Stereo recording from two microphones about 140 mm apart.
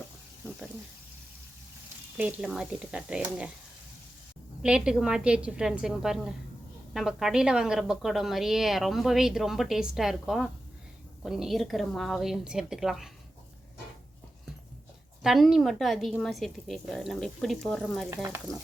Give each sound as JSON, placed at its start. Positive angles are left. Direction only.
{"t": 2.1, "sound": "speech", "side_deg": -10}
{"t": 4.6, "sound": "a woman's voice", "side_deg": -5}
{"t": 15.2, "sound": "a woman's voice", "side_deg": 0}
{"t": 18.1, "sound": "speech", "side_deg": -20}